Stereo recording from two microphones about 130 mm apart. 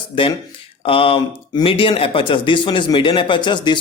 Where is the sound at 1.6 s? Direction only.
45° left (ahead or behind).